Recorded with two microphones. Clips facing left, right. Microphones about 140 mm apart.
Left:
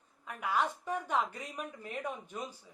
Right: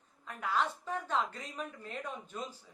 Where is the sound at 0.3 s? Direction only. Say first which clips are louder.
Left 1 dB; 10° left (ahead or behind).